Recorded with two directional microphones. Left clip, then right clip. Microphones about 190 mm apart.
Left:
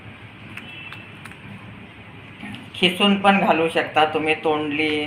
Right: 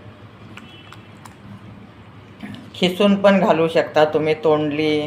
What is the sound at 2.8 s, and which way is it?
Speech, 60° right (ahead or behind).